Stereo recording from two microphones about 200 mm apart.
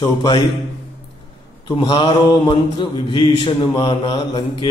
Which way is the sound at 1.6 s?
25° left (ahead or behind).